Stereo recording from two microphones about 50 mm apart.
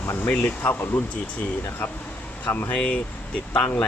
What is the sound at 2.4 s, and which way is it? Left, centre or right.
Speech, left.